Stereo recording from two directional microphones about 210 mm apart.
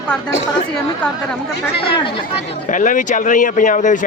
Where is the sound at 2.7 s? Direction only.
40° left (ahead or behind).